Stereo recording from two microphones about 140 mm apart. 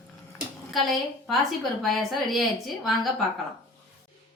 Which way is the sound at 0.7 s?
Centre (ahead or behind).